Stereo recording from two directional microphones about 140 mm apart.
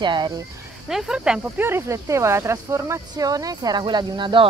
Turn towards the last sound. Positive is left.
turn(degrees=-35)  # may be behind; listen again after turning